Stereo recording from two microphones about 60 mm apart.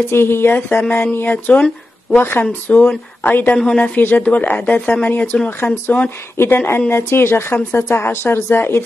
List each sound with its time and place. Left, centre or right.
0.1 s speech: left
1.5 s speech: centre
2.1 s speech: left
2.4 s speech: left
3.5 s a woman's voice: centre
3.9 s speech: left
5.6 s speech: left